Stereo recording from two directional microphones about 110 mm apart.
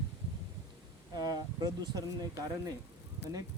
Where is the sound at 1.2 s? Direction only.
35° right (ahead or behind).